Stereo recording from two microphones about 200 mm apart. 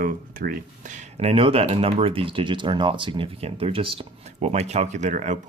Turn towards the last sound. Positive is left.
turn(degrees=-40)  # may be behind; listen again after turning